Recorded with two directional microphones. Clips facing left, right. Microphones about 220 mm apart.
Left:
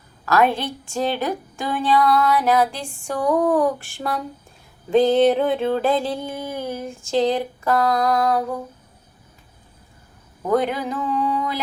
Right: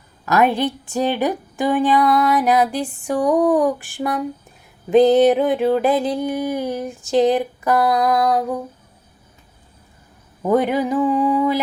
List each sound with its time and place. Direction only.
0.3 s a woman's voice: 15° right (ahead or behind)
10.5 s a woman's voice: 10° right (ahead or behind)